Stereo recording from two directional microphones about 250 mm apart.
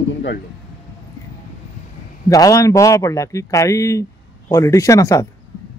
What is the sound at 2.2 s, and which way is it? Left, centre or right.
Speech, centre.